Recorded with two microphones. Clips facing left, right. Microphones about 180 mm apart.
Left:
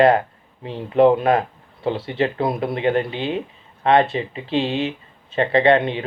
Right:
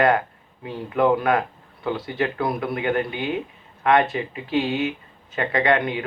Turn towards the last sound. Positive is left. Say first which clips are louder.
# left 5 dB
turn(degrees=25)  # may be behind; listen again after turning